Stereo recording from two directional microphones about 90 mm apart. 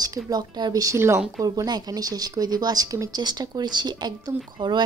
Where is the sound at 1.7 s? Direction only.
50° right (ahead or behind).